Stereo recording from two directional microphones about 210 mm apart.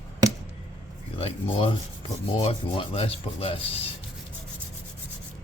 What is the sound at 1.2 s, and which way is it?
Speech, 25° left (ahead or behind).